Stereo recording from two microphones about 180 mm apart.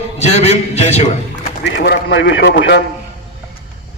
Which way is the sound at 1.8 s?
80° left.